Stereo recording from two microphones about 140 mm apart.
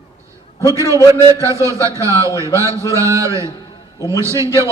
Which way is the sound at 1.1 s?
20° right (ahead or behind).